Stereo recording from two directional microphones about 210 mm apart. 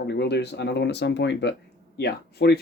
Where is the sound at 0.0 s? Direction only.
50° left (ahead or behind).